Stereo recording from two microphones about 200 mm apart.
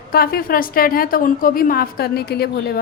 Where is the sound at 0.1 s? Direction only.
50° left (ahead or behind).